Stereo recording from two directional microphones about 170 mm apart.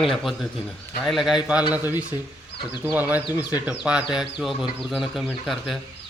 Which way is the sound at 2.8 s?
10° right (ahead or behind).